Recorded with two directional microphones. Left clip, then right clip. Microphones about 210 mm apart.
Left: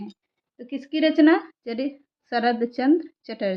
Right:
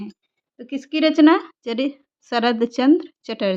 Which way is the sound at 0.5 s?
45° right (ahead or behind).